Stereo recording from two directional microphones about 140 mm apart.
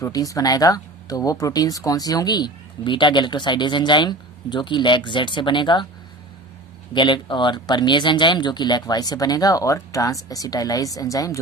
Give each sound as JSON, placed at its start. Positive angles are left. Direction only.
{"t": 0.0, "sound": "speech", "side_deg": 25}
{"t": 6.9, "sound": "speech", "side_deg": 35}